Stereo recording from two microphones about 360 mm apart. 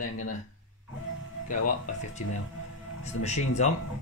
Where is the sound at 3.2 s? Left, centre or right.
Centre.